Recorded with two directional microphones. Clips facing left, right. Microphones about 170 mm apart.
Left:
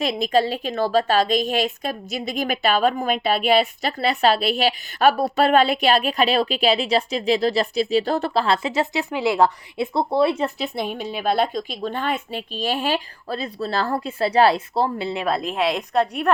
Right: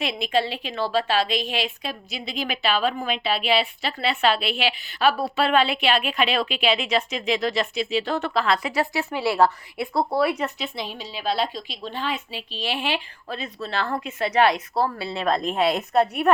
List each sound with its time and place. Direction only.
0.0 s a woman's voice: 40° left (ahead or behind)
10.8 s a woman's voice: 55° left (ahead or behind); by 16.3 s 5° right (ahead or behind)